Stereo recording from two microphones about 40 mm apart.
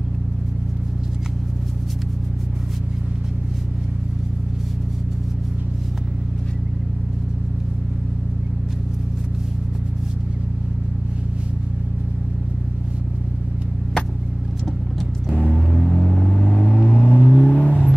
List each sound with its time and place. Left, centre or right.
15.4 s music: left
15.9 s vehicle: left